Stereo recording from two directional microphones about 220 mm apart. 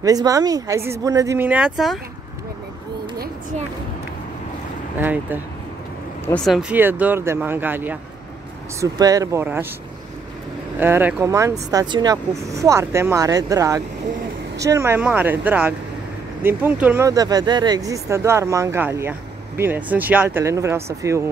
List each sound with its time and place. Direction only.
0.0 s speech: 15° right (ahead or behind)
4.9 s speech: 10° right (ahead or behind)
6.2 s speech: 5° left (ahead or behind)
10.8 s speech: 10° right (ahead or behind)